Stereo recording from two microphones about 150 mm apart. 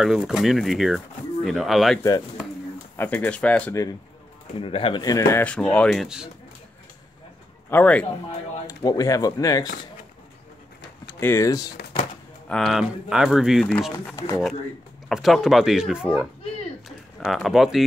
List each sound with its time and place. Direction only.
0.0 s speech: 5° right (ahead or behind)
3.0 s speech: 10° left (ahead or behind)
4.6 s speech: 35° left (ahead or behind)
5.0 s speech: 20° left (ahead or behind)
5.4 s speech: 10° left (ahead or behind)
7.7 s speech: 10° left (ahead or behind)
8.6 s speech: 25° left (ahead or behind)
11.1 s speech: 15° left (ahead or behind)
12.4 s speech: centre (ahead or behind)
14.1 s speech: 20° left (ahead or behind)
15.0 s speech: centre (ahead or behind)
17.3 s speech: centre (ahead or behind)